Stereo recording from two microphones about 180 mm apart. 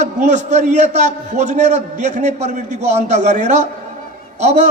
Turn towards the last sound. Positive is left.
turn(degrees=-40)  # may be behind; listen again after turning